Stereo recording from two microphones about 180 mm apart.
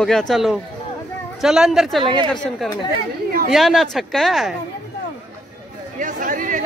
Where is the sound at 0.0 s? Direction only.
5° left (ahead or behind).